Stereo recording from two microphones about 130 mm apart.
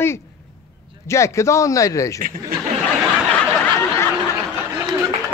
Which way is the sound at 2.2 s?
90° right.